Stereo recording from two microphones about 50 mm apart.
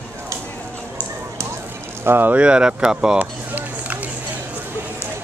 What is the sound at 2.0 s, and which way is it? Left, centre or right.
Speech, right.